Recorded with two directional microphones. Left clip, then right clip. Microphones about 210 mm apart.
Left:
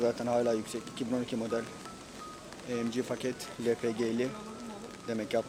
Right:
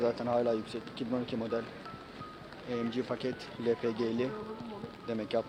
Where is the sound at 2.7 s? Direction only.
15° left (ahead or behind).